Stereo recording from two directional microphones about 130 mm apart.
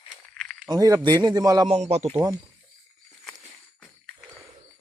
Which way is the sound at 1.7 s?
55° right (ahead or behind).